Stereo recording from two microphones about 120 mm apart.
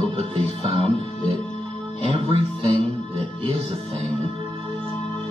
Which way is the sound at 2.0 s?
50° right (ahead or behind).